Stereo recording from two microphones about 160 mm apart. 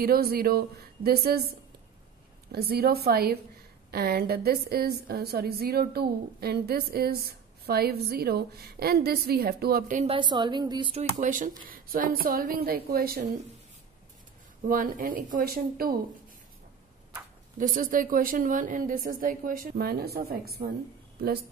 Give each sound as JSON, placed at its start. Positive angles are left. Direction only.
{"t": 0.0, "sound": "a woman's voice", "side_deg": -70}
{"t": 2.5, "sound": "a woman's voice", "side_deg": -80}
{"t": 10.0, "sound": "a woman's voice", "side_deg": -30}
{"t": 10.9, "sound": "a woman's voice", "side_deg": -45}
{"t": 14.7, "sound": "a woman's voice", "side_deg": -60}
{"t": 17.6, "sound": "a woman's voice", "side_deg": -60}